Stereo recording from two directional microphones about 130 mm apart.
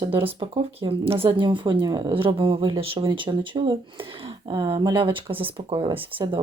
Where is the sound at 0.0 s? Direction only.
40° right (ahead or behind).